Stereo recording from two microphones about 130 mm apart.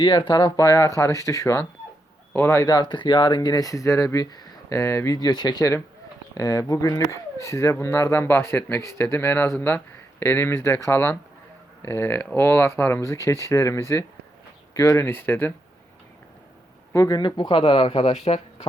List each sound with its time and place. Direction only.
0.0 s speech: 40° left (ahead or behind); by 15.5 s 15° left (ahead or behind)
16.9 s speech: 30° left (ahead or behind); by 18.4 s 55° left (ahead or behind)